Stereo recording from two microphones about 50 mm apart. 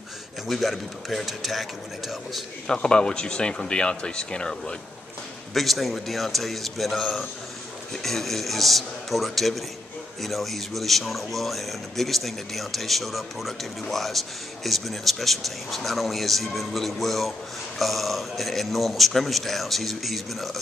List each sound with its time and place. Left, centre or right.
0.5 s speech: centre
2.6 s speech: centre
5.5 s speech: centre